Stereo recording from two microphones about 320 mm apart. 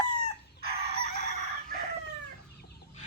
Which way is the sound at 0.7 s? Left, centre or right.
Centre.